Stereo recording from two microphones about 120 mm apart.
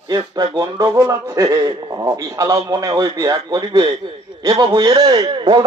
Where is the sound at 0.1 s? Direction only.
30° right (ahead or behind).